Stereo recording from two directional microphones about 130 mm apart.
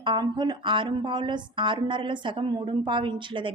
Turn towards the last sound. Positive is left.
turn(degrees=-40)  # may be behind; listen again after turning